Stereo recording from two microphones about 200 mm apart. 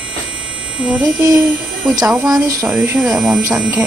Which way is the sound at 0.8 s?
5° right (ahead or behind).